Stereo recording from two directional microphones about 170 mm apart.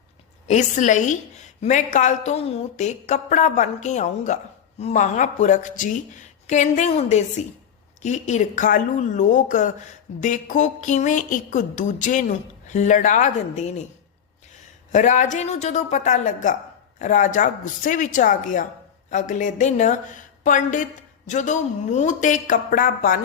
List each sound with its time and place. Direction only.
0.4 s speech: 45° left (ahead or behind)
14.9 s speech: 45° left (ahead or behind)